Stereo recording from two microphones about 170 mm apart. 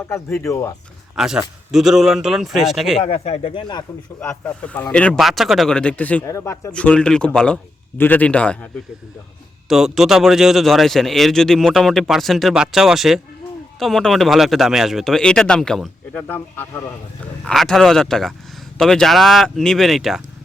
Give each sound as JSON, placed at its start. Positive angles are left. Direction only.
{"t": 0.4, "sound": "speech", "side_deg": 20}
{"t": 1.1, "sound": "a man's voice", "side_deg": -5}
{"t": 3.1, "sound": "speech", "side_deg": 35}
{"t": 4.2, "sound": "a man's voice", "side_deg": 5}
{"t": 17.4, "sound": "a man's voice", "side_deg": 5}